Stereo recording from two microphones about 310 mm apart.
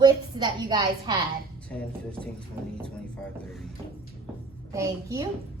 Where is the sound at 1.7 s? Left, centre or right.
Centre.